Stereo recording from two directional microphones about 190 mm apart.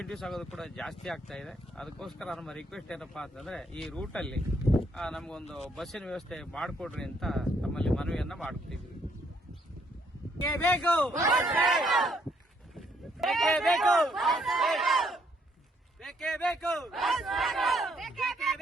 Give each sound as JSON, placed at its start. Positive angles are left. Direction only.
{"t": 0.0, "sound": "speech", "side_deg": 0}
{"t": 10.4, "sound": "speech", "side_deg": 20}
{"t": 10.7, "sound": "speech", "side_deg": 5}